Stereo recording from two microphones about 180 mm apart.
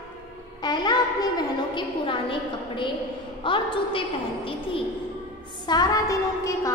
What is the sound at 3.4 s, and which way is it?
Speech, 30° left (ahead or behind).